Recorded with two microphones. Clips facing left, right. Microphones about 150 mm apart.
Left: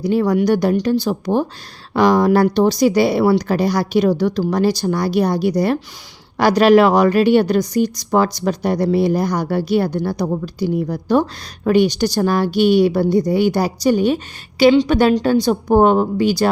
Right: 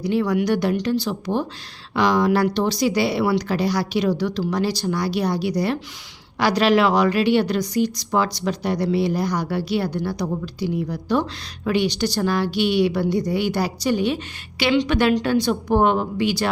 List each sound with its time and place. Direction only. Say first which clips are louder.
0.0 s a woman's voice: left 5 dB; 40° left (ahead or behind)